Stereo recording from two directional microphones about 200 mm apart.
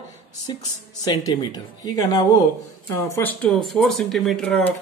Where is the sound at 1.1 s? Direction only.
20° left (ahead or behind).